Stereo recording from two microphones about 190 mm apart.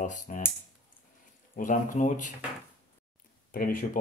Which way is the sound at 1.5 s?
45° left (ahead or behind).